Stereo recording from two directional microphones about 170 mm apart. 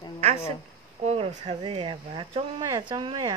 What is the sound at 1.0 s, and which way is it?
Speech, 35° right (ahead or behind).